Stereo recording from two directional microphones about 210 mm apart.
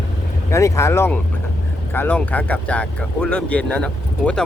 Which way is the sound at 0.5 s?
15° left (ahead or behind).